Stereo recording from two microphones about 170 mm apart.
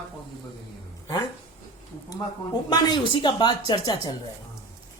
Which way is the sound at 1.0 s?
20° left (ahead or behind).